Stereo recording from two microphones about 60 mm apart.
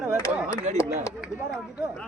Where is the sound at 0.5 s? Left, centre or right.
Left.